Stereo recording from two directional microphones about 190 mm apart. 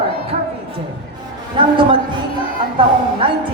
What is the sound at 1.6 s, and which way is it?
Speech, 25° right (ahead or behind).